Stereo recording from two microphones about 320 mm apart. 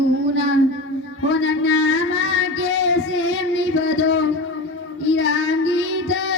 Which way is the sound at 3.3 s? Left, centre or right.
Left.